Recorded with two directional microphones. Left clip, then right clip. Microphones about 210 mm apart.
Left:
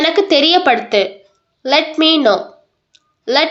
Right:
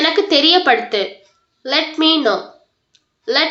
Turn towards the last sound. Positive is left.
turn(degrees=45)  # may be behind; listen again after turning